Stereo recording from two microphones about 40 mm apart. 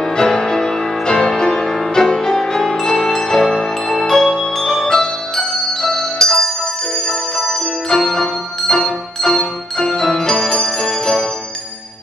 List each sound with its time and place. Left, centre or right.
0.0 s music: centre